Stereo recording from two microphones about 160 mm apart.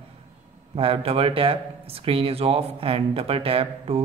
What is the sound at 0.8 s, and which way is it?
Speech, 35° right (ahead or behind).